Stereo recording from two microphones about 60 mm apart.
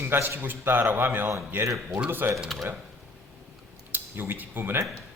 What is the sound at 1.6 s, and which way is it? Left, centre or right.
Speech, right.